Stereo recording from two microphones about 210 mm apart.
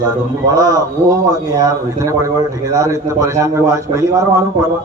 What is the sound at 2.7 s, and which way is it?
A man's voice, 15° right (ahead or behind).